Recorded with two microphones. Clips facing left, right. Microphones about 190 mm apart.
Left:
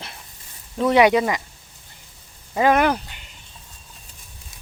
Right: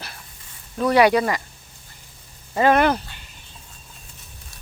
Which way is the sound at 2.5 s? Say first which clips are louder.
Right 1 dB; 10° left (ahead or behind).